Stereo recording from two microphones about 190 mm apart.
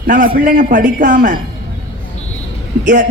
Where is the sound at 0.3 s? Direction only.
45° right (ahead or behind).